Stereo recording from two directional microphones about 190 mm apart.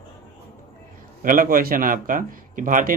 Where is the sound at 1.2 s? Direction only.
45° right (ahead or behind).